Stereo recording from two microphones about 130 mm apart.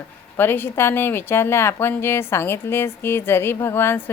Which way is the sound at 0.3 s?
15° left (ahead or behind).